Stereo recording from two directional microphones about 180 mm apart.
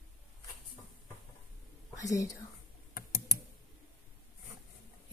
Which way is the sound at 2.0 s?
20° left (ahead or behind).